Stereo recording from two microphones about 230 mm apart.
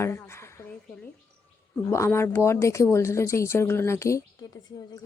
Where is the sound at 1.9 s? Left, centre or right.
Centre.